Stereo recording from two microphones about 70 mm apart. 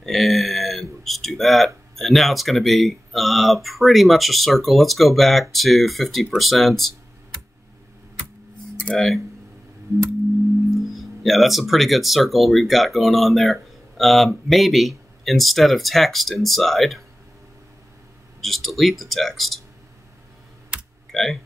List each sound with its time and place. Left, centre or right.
0.0 s speech: centre
8.9 s speech: centre
11.0 s speech: centre
18.4 s speech: centre
20.7 s computer keyboard: centre
21.1 s speech: centre